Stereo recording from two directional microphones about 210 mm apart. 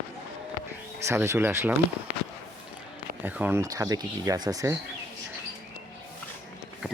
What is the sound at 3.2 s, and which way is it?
Speech, 10° right (ahead or behind).